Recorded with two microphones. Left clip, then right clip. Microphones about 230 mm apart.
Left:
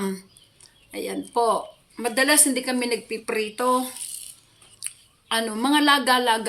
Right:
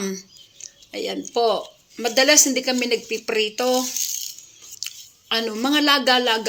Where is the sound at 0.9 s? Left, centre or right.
Left.